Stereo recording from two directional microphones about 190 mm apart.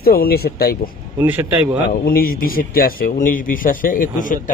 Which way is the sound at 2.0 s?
50° left (ahead or behind).